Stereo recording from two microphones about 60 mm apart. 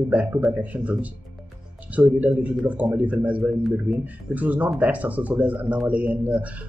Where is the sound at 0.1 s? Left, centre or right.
Right.